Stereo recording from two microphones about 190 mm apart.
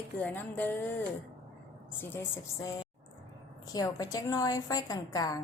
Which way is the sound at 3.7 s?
20° left (ahead or behind).